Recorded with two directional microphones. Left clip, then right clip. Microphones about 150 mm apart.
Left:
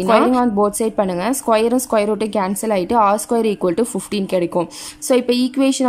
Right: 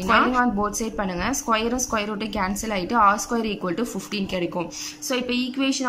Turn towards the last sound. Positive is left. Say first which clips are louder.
# left 8 dB
turn(degrees=35)  # may be behind; listen again after turning